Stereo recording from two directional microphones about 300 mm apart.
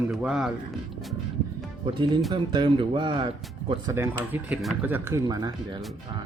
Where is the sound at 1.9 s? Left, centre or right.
Centre.